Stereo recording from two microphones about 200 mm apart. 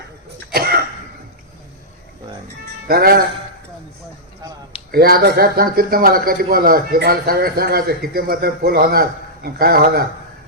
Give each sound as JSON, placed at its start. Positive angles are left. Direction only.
{"t": 0.5, "sound": "cough", "side_deg": -50}
{"t": 2.8, "sound": "a man's voice", "side_deg": -50}
{"t": 4.9, "sound": "a man's voice", "side_deg": -50}